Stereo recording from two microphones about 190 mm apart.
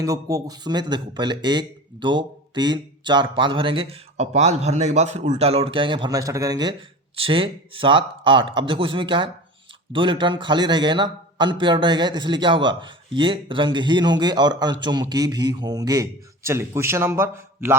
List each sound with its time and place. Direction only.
0.0 s a man's voice: 20° right (ahead or behind)